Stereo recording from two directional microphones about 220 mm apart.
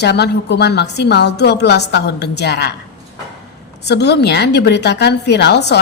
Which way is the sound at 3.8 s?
50° left (ahead or behind).